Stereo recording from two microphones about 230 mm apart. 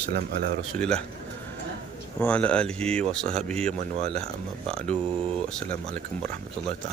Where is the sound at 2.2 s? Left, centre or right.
Centre.